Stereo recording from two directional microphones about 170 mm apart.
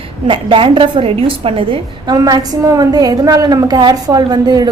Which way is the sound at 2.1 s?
20° right (ahead or behind).